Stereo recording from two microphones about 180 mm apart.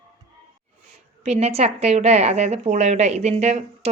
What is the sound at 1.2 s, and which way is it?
Speech, 35° right (ahead or behind).